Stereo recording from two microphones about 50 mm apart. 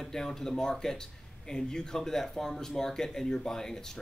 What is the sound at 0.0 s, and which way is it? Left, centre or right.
A man's voice, centre.